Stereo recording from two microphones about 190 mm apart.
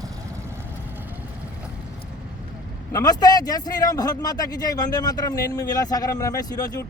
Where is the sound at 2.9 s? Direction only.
20° left (ahead or behind).